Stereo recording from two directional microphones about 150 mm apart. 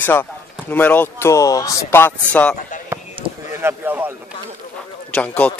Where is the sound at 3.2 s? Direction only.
35° right (ahead or behind).